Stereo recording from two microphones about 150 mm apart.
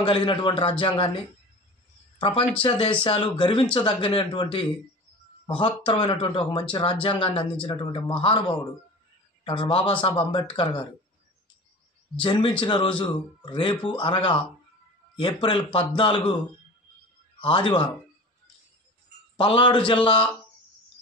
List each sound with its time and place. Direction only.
0.0 s speech: 35° left (ahead or behind)
2.1 s speech: 35° left (ahead or behind)
12.2 s speech: 30° left (ahead or behind)
17.4 s speech: 35° left (ahead or behind)
19.3 s speech: 35° left (ahead or behind)